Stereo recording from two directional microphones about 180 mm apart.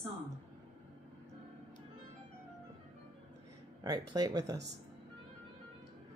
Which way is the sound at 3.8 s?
20° right (ahead or behind).